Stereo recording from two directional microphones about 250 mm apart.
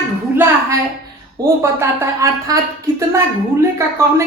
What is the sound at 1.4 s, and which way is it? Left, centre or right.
Speech, centre.